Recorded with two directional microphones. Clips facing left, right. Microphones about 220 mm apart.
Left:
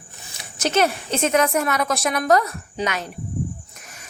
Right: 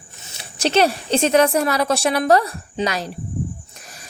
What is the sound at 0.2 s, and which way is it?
Speech, 25° right (ahead or behind).